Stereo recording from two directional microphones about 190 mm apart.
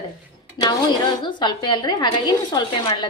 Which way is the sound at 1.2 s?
25° left (ahead or behind).